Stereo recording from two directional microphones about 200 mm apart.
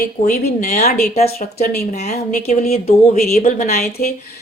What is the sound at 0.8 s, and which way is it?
Speech, 50° left (ahead or behind).